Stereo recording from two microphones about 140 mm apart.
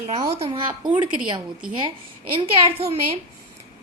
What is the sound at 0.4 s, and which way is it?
Speech, 40° right (ahead or behind).